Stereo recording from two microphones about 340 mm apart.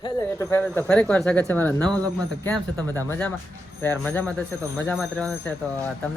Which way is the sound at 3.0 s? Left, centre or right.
Centre.